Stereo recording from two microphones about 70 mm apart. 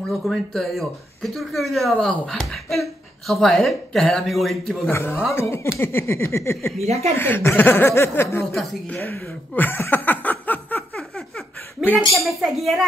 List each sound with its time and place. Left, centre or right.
0.1 s speech: centre
4.8 s speech: left
9.6 s laughter: left
11.0 s laughter: centre
11.8 s a woman's voice: centre